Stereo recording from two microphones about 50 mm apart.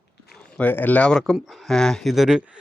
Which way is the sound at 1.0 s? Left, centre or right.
Centre.